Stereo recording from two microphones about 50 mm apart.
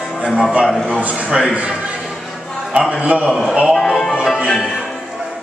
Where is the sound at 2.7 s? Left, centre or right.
Right.